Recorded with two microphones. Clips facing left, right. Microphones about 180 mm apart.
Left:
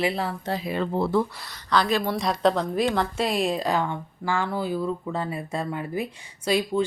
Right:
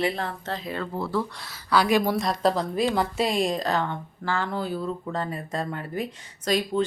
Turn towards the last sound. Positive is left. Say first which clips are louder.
# left 1 dB
turn(degrees=10)  # may be behind; listen again after turning